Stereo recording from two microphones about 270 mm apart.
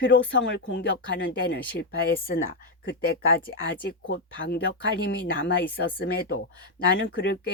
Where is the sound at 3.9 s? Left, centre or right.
Left.